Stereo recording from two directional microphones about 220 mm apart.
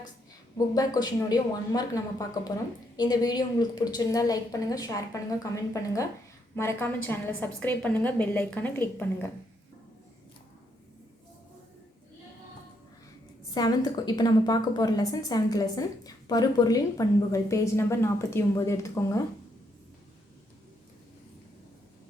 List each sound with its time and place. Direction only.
0.5 s a woman's voice: 15° left (ahead or behind)
13.5 s a woman's voice: 15° left (ahead or behind)